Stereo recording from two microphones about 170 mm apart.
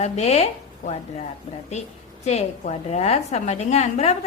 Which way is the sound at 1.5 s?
40° left (ahead or behind).